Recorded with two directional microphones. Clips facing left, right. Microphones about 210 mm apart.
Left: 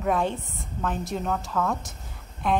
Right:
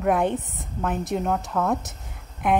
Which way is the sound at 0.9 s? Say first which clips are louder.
Right 4 dB; 60° right (ahead or behind).